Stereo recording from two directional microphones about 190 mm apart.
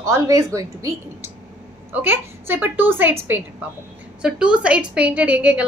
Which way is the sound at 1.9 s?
10° right (ahead or behind).